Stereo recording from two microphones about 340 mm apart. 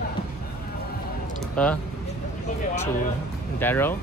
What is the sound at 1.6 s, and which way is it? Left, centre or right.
Speech, centre.